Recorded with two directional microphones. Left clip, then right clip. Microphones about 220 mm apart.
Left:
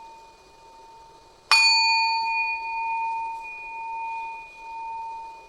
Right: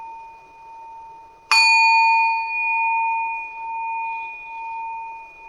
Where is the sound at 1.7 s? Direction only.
45° right (ahead or behind).